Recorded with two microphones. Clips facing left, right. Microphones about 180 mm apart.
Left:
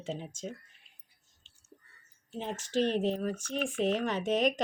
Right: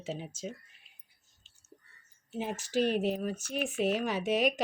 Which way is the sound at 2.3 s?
5° right (ahead or behind).